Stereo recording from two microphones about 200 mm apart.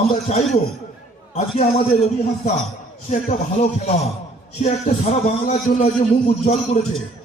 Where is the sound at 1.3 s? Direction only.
30° left (ahead or behind).